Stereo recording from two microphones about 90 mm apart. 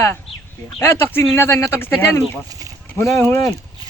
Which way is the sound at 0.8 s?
25° left (ahead or behind).